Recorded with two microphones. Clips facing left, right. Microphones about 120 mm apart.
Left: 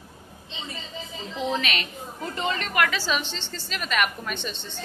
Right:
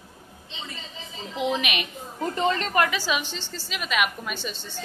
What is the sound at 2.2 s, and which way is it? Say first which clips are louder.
Speech: right 4 dB; 40° right (ahead or behind).